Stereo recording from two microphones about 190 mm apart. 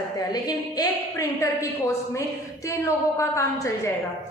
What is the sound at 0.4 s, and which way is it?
A woman's voice, 20° left (ahead or behind).